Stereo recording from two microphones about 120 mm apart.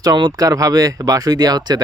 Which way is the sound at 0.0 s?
35° right (ahead or behind).